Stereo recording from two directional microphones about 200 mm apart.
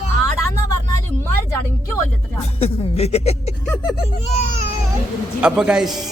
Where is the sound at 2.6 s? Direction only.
30° left (ahead or behind).